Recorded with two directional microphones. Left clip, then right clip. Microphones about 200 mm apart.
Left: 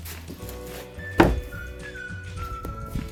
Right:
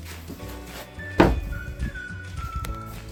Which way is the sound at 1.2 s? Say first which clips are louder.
Even; 25° left (ahead or behind).